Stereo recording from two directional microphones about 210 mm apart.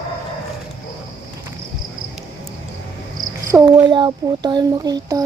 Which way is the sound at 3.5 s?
15° right (ahead or behind).